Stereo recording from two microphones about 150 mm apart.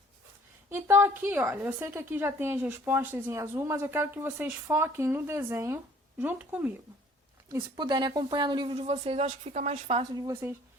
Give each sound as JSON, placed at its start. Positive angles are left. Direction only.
{"t": 0.7, "sound": "a woman's voice", "side_deg": -15}
{"t": 7.5, "sound": "speech", "side_deg": -30}
{"t": 8.9, "sound": "speech", "side_deg": -40}
{"t": 10.0, "sound": "speech", "side_deg": -25}